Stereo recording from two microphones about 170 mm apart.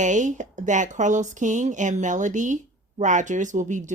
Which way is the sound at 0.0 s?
45° right (ahead or behind).